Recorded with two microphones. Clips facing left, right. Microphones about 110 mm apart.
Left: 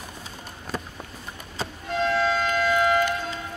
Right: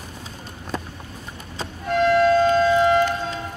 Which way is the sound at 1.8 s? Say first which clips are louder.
Right 7 dB; 55° right (ahead or behind).